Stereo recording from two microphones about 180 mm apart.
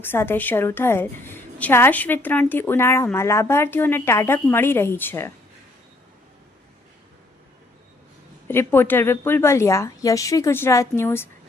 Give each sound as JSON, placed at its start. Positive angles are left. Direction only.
{"t": 0.0, "sound": "a woman's voice", "side_deg": 10}
{"t": 8.4, "sound": "a woman's voice", "side_deg": 10}